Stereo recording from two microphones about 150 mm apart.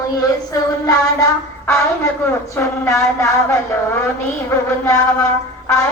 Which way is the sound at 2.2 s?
15° left (ahead or behind).